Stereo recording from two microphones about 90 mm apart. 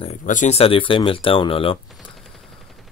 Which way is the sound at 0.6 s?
85° left.